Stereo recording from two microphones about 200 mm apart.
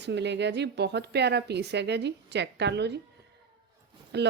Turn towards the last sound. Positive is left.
turn(degrees=-55)  # may be behind; listen again after turning